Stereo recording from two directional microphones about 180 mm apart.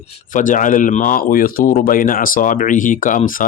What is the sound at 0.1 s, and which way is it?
Speech, 45° left (ahead or behind).